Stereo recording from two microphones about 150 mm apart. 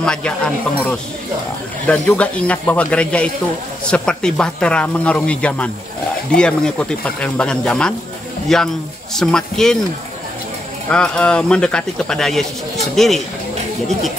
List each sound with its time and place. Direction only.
0.0 s speech: 5° left (ahead or behind)
10.9 s speech: 5° left (ahead or behind)